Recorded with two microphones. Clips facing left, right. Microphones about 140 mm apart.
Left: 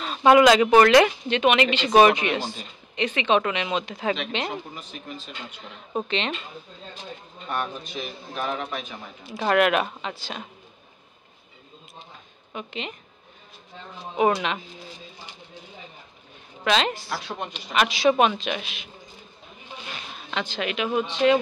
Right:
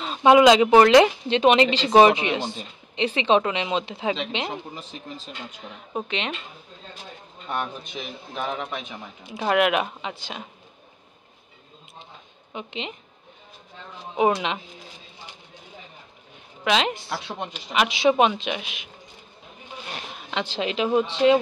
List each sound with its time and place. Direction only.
0.0 s speech: 20° right (ahead or behind)
5.6 s speech: 10° right (ahead or behind)
7.4 s speech: 20° right (ahead or behind)
12.5 s speech: 20° right (ahead or behind)
16.6 s speech: 15° right (ahead or behind)
20.2 s a sound: 15° right (ahead or behind)
20.5 s speech: 30° right (ahead or behind)